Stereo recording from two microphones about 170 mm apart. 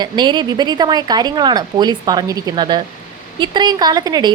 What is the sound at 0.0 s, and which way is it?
A woman's voice, 25° right (ahead or behind).